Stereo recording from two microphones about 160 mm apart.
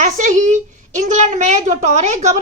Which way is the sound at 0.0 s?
50° right (ahead or behind).